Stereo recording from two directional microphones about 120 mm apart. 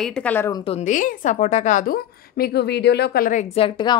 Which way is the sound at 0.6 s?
65° left (ahead or behind).